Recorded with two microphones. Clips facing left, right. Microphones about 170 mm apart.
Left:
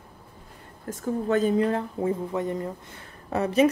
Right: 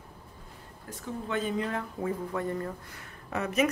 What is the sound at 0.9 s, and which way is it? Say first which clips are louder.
Speech: left 9 dB; 40° left (ahead or behind).